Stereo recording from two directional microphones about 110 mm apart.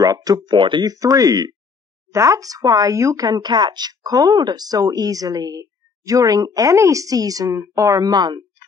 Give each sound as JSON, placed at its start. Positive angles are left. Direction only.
{"t": 0.0, "sound": "speech", "side_deg": -35}